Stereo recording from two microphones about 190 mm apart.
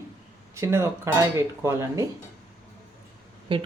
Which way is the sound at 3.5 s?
25° right (ahead or behind).